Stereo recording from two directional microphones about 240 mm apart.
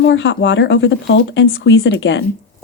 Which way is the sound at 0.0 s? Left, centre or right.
Left.